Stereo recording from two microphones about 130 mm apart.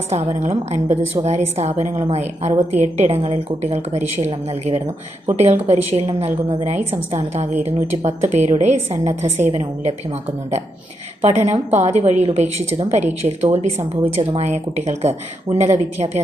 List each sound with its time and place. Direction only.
0.1 s a woman's voice: 60° right (ahead or behind)